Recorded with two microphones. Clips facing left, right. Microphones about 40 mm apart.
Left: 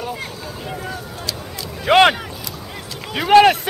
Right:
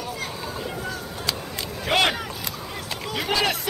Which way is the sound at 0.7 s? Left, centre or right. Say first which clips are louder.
Left 2 dB; centre.